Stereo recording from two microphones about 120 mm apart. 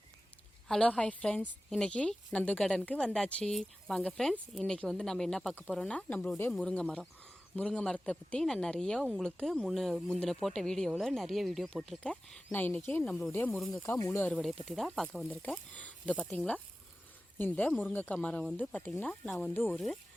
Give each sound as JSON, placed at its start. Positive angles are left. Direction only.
{"t": 0.7, "sound": "a woman's voice", "side_deg": 5}
{"t": 13.6, "sound": "speech", "side_deg": 0}
{"t": 13.8, "sound": "speech", "side_deg": 25}
{"t": 14.4, "sound": "speech", "side_deg": 0}
{"t": 15.3, "sound": "a woman's voice", "side_deg": 15}
{"t": 16.2, "sound": "speech", "side_deg": 0}
{"t": 17.3, "sound": "a woman's voice", "side_deg": 15}